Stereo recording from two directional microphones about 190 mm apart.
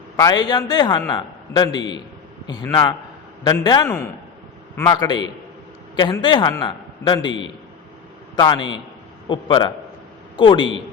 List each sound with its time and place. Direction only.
0.2 s a man's voice: 20° left (ahead or behind)
7.3 s a man's voice: 75° left (ahead or behind)
8.4 s a man's voice: 25° left (ahead or behind)